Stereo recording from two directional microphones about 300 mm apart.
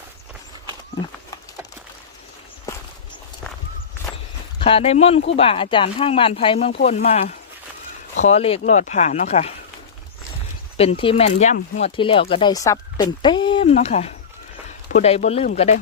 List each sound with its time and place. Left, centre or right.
4.6 s speech: centre
10.8 s speech: centre